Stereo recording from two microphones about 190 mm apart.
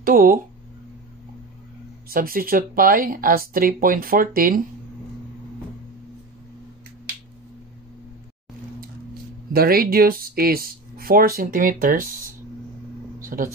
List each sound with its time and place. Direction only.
0.0 s speech: 50° right (ahead or behind)
2.0 s speech: 50° right (ahead or behind)
9.5 s speech: 50° right (ahead or behind)
13.2 s a sound: 45° right (ahead or behind)